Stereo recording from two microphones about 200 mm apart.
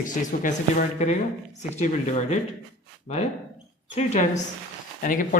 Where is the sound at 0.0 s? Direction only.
40° left (ahead or behind).